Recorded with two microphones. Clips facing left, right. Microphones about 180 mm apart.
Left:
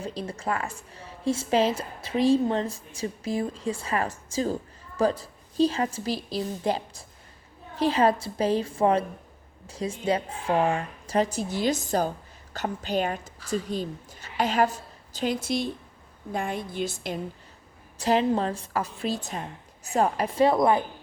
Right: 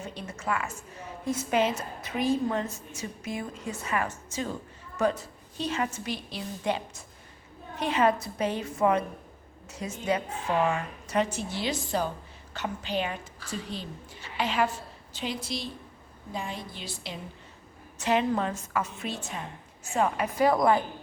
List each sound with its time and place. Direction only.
0.0 s a woman's voice: 35° left (ahead or behind)
17.9 s a woman's voice: 35° left (ahead or behind)